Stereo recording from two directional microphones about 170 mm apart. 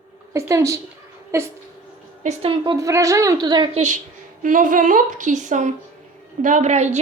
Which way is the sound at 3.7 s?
45° right (ahead or behind).